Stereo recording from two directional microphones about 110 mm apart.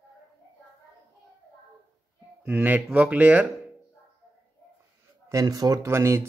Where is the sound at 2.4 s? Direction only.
15° right (ahead or behind).